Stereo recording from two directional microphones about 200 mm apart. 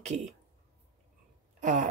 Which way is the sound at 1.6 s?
40° right (ahead or behind).